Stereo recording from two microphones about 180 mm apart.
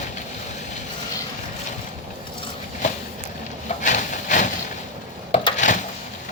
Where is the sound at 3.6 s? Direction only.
45° left (ahead or behind).